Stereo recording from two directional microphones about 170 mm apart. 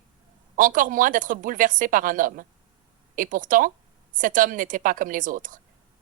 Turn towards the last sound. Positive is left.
turn(degrees=-50)  # may be behind; listen again after turning